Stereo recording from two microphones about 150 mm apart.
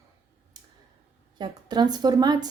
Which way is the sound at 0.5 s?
30° right (ahead or behind).